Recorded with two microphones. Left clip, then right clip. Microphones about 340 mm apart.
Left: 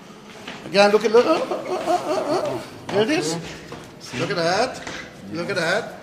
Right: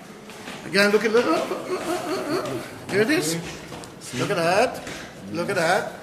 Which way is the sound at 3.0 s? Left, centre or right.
Centre.